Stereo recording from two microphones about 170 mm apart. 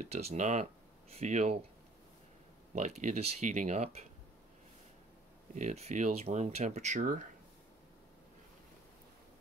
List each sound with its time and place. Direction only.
0.0 s speech: 40° right (ahead or behind)
2.7 s speech: 45° right (ahead or behind)
5.5 s speech: 45° right (ahead or behind)